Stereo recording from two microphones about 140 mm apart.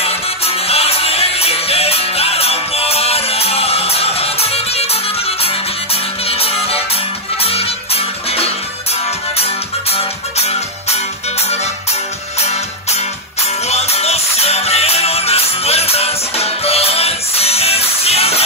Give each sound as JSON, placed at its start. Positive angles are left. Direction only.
{"t": 0.0, "sound": "music", "side_deg": 45}
{"t": 6.2, "sound": "music", "side_deg": 45}
{"t": 12.4, "sound": "music", "side_deg": 50}